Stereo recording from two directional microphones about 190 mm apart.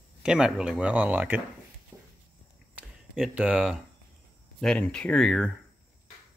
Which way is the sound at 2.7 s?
5° right (ahead or behind).